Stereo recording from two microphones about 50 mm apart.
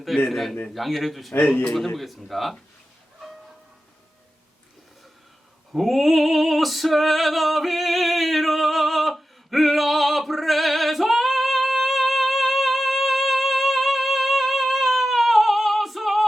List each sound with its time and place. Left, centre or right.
0.3 s speech: centre
5.7 s female singing: centre